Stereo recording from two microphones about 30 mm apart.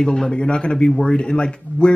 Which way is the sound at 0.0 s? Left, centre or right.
Centre.